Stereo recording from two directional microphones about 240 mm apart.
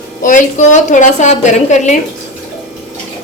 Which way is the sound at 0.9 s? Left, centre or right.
Left.